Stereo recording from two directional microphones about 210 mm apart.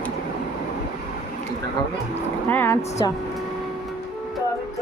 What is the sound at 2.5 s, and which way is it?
Speech, 10° left (ahead or behind).